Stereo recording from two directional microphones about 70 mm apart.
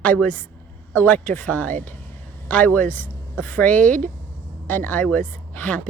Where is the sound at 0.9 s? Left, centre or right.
Left.